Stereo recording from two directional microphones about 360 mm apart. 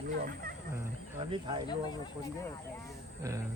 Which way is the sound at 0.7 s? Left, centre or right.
Centre.